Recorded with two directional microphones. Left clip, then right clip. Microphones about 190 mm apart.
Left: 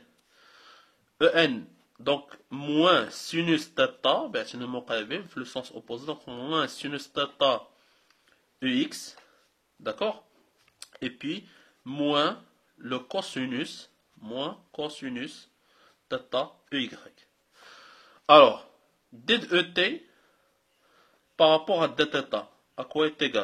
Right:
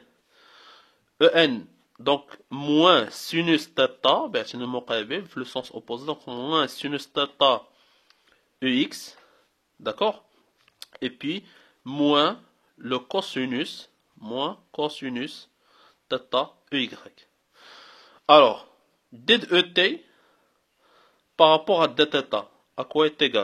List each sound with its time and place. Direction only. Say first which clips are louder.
0.4 s speech: right 3 dB; 45° right (ahead or behind)
8.1 s a sound: right 3 dB; 45° right (ahead or behind)
9.8 s speech: right 5 dB; 40° right (ahead or behind)
21.0 s speech: right 4 dB; 45° right (ahead or behind)